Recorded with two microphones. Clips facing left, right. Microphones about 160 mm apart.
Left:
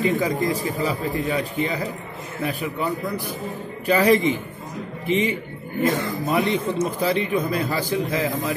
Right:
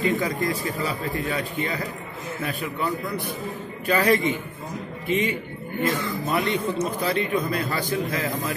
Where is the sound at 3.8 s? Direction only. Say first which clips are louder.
Left 3 dB; 15° left (ahead or behind).